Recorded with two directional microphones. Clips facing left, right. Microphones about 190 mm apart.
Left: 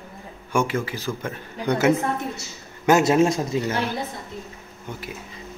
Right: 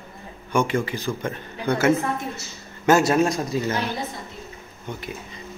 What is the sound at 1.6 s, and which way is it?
Speech, 15° left (ahead or behind).